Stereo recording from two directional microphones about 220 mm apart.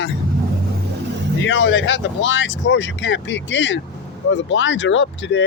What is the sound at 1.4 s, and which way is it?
Speech, 55° left (ahead or behind).